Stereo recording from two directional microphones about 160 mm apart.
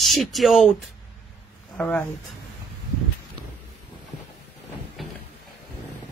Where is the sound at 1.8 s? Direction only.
10° left (ahead or behind).